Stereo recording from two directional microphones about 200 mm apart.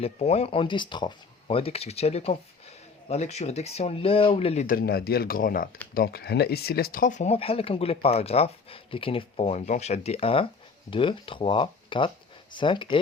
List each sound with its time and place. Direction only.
0.0 s speech: 30° left (ahead or behind)
4.6 s speech: 45° left (ahead or behind); by 13.0 s 25° left (ahead or behind)